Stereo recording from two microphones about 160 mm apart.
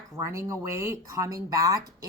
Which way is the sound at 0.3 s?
15° right (ahead or behind).